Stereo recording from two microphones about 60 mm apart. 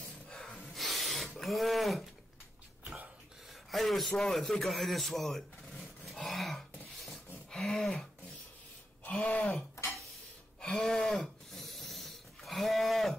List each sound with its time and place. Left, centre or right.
0.7 s filing: centre
1.4 s speech: centre
3.7 s a man's voice: centre
4.1 s a sound: centre
9.1 s speech: centre
10.6 s a sound: centre